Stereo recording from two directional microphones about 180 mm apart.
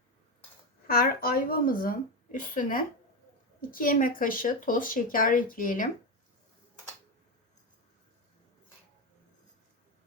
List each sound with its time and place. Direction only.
0.9 s a woman's voice: 55° left (ahead or behind)